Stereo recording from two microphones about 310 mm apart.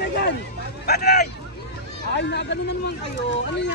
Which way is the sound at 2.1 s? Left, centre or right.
Left.